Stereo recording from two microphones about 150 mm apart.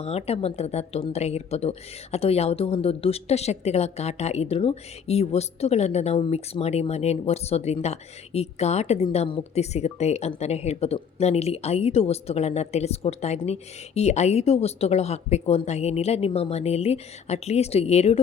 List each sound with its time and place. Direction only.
0.0 s a woman's voice: 45° left (ahead or behind)